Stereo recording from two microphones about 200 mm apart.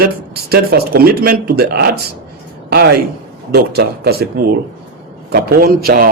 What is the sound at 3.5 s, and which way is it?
Speech, 50° right (ahead or behind).